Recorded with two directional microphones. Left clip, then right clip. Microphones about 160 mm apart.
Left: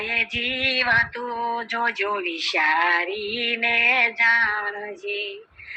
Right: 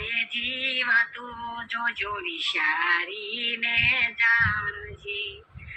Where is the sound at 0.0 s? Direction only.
45° left (ahead or behind).